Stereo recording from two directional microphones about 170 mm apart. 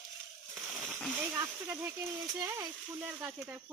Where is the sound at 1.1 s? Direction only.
15° right (ahead or behind).